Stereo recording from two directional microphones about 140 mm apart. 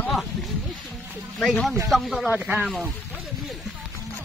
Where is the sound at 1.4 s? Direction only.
Centre (ahead or behind).